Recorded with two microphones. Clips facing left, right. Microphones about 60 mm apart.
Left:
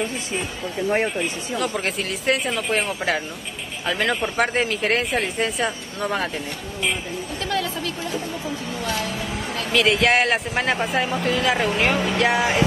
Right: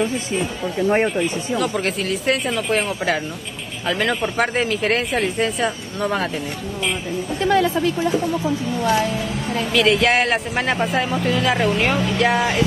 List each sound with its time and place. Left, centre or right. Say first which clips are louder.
0.3 s a man's voice: right 4 dB; centre
7.4 s a woman's voice: right 9 dB; right
9.7 s a man's voice: right 1 dB; centre